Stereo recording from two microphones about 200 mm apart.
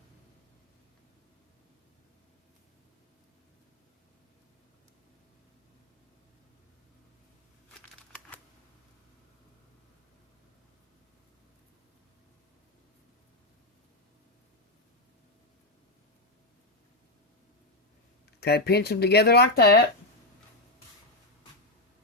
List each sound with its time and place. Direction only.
18.3 s speech: 55° left (ahead or behind)